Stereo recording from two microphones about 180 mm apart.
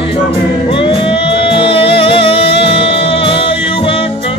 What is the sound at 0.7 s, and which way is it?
Music, 30° left (ahead or behind).